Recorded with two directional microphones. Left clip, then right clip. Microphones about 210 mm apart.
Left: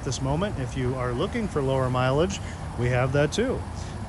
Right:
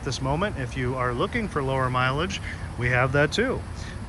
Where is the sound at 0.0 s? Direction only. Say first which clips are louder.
Right 2 dB; 15° left (ahead or behind).